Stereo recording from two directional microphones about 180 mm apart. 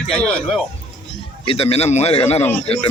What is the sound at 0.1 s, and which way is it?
Speech, centre (ahead or behind).